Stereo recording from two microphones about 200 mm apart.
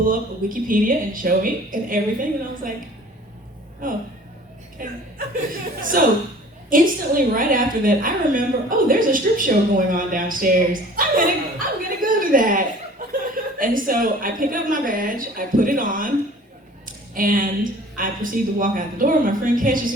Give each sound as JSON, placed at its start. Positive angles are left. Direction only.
{"t": 0.0, "sound": "a woman's voice", "side_deg": -45}
{"t": 3.8, "sound": "a woman's voice", "side_deg": -45}
{"t": 6.0, "sound": "a woman's voice", "side_deg": -45}
{"t": 13.0, "sound": "chuckle", "side_deg": -45}
{"t": 13.3, "sound": "a woman's voice", "side_deg": -45}